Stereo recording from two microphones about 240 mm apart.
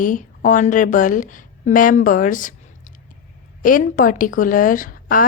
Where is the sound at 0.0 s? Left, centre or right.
Left.